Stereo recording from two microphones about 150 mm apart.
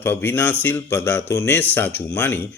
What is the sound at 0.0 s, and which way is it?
Speech, 15° left (ahead or behind).